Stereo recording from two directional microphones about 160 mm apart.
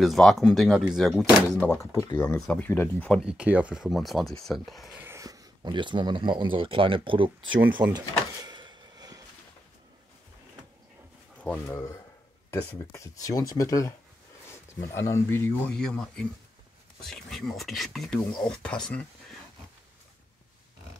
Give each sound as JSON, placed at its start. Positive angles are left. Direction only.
{"t": 0.0, "sound": "speech", "side_deg": 0}
{"t": 2.3, "sound": "speech", "side_deg": 5}
{"t": 3.3, "sound": "speech", "side_deg": -5}
{"t": 5.0, "sound": "speech", "side_deg": -20}
{"t": 8.5, "sound": "a sound", "side_deg": -25}
{"t": 11.4, "sound": "speech", "side_deg": 10}
{"t": 17.0, "sound": "speech", "side_deg": 0}